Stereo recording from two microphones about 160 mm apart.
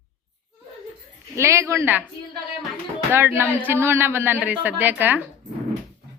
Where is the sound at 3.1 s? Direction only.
15° right (ahead or behind).